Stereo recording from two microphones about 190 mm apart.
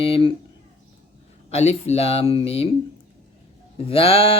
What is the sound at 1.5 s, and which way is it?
Speech, 35° left (ahead or behind).